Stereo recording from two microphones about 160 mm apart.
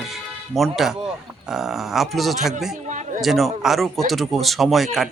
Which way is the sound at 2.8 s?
50° right (ahead or behind).